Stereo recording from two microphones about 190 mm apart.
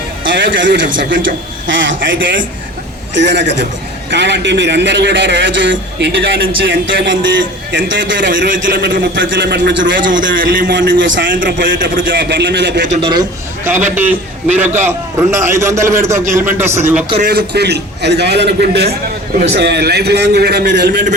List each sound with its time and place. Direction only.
0.3 s a man's voice: 75° right (ahead or behind)
3.2 s a man's voice: 65° right (ahead or behind)
10.0 s a man's voice: 45° right (ahead or behind)
10.7 s a man's voice: 70° right (ahead or behind)
12.8 s speech: 40° right (ahead or behind)
13.9 s a man's voice: 10° right (ahead or behind)
17.2 s a man's voice: 55° right (ahead or behind)